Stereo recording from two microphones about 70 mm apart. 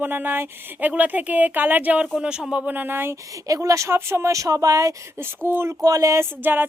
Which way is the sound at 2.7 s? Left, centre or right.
Right.